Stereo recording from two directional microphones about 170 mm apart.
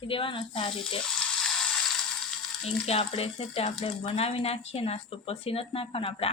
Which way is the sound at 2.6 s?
35° left (ahead or behind).